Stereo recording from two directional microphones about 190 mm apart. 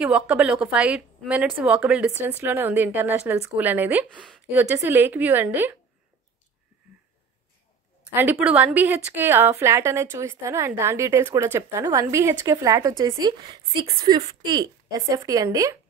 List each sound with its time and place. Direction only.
0.0 s a woman's voice: 5° right (ahead or behind)
8.1 s a woman's voice: 10° right (ahead or behind)